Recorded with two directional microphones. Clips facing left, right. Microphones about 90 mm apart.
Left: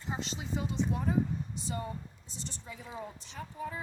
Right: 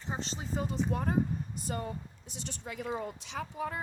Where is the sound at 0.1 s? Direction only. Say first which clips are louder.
Even; 35° right (ahead or behind); by 3.8 s 65° right (ahead or behind).